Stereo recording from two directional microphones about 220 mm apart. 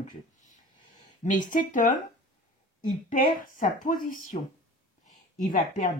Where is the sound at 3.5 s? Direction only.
40° left (ahead or behind).